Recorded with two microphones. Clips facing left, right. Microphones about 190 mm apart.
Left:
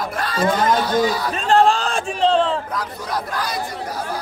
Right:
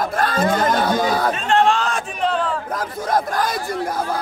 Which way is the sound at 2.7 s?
50° right (ahead or behind).